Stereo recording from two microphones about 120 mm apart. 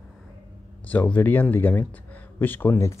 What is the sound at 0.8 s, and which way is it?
Speech, 10° left (ahead or behind).